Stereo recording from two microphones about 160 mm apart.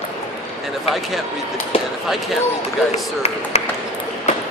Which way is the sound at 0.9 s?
Centre (ahead or behind).